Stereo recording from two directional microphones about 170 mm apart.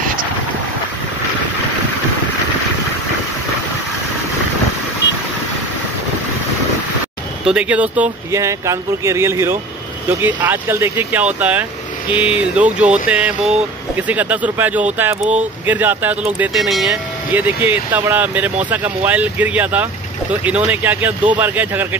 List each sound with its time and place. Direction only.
7.4 s speech: 5° right (ahead or behind)